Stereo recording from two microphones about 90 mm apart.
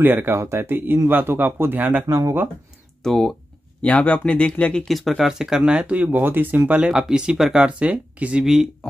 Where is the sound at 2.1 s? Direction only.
35° right (ahead or behind).